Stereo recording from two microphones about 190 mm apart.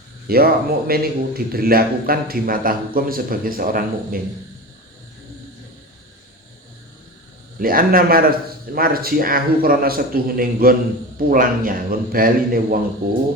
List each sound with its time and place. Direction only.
0.3 s a man's voice: 50° right (ahead or behind)
7.6 s a man's voice: 50° right (ahead or behind)